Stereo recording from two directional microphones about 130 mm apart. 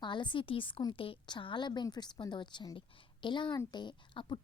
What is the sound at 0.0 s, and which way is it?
A woman's voice, 35° left (ahead or behind).